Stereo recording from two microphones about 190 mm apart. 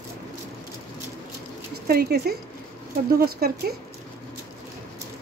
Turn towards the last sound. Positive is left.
turn(degrees=-55)  # may be behind; listen again after turning